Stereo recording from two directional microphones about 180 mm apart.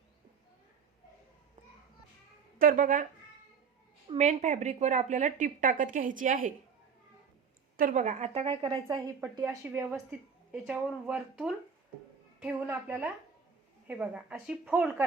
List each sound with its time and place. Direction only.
2.6 s a woman's voice: 50° right (ahead or behind)
4.2 s a woman's voice: 40° right (ahead or behind)
7.8 s a woman's voice: 50° right (ahead or behind)
9.4 s a woman's voice: 10° right (ahead or behind)